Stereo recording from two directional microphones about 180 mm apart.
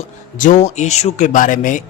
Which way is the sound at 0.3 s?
45° left (ahead or behind).